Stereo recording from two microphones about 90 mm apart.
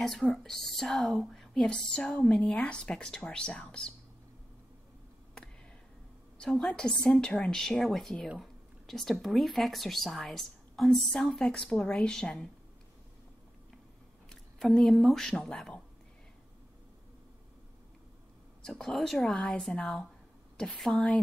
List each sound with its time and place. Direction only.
0.0 s speech: 5° left (ahead or behind)
6.3 s speech: 10° left (ahead or behind)
14.3 s speech: 5° left (ahead or behind)
18.6 s speech: 5° left (ahead or behind)